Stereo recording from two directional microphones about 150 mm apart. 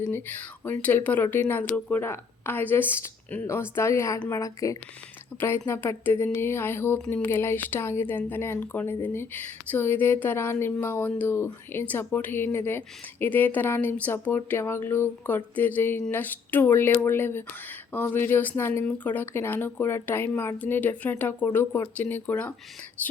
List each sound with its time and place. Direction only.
0.1 s a woman's voice: 15° left (ahead or behind)